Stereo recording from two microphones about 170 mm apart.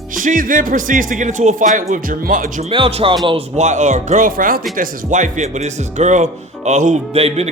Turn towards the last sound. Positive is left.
turn(degrees=-35)  # may be behind; listen again after turning